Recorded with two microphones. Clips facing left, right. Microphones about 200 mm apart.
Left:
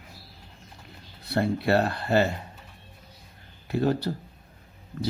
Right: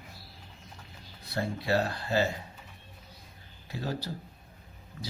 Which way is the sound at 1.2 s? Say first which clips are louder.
Left 7 dB; 65° left (ahead or behind).